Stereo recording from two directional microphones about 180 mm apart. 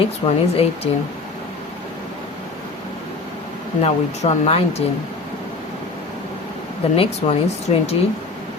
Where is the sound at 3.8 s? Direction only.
35° left (ahead or behind).